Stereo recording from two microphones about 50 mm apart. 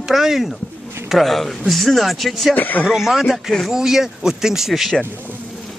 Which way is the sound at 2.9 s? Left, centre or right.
Centre.